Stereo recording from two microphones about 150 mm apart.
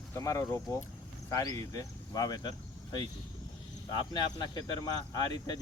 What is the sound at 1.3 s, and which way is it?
Speech, 20° left (ahead or behind).